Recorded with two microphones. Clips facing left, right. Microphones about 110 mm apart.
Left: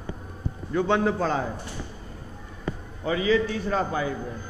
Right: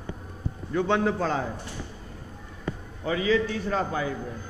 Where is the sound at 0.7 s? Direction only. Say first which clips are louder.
Left 1 dB; 15° left (ahead or behind).